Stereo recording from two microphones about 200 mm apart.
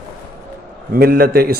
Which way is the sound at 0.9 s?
50° right (ahead or behind).